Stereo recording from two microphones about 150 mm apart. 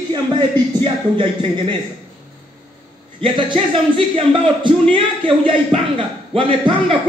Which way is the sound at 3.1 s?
35° right (ahead or behind).